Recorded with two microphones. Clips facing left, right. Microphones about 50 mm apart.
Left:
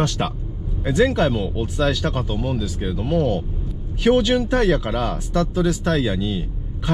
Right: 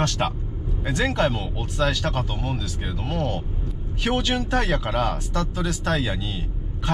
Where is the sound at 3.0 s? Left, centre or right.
Right.